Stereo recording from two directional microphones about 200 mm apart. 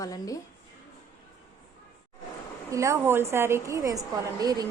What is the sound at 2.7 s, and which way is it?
A woman's voice, 15° right (ahead or behind).